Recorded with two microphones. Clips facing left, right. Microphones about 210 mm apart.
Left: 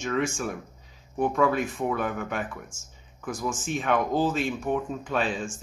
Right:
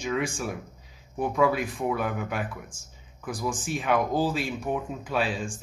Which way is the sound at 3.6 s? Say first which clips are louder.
Even; 5° right (ahead or behind).